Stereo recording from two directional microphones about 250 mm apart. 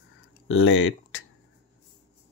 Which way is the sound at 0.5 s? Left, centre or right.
Left.